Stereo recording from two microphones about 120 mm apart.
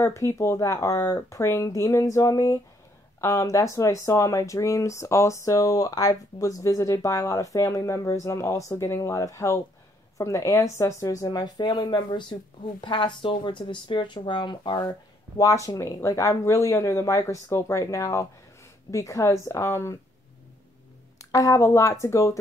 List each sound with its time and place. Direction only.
0.0 s speech: 25° left (ahead or behind)
21.2 s speech: 25° left (ahead or behind)